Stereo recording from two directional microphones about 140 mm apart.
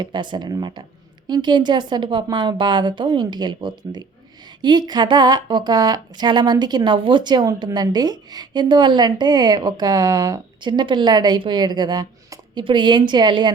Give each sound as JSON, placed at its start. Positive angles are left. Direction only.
{"t": 0.0, "sound": "a woman's voice", "side_deg": -35}